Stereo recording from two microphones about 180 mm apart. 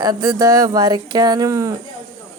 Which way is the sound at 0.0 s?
20° right (ahead or behind).